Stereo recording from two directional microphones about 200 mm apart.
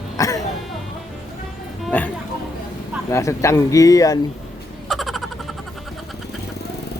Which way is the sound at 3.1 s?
15° left (ahead or behind).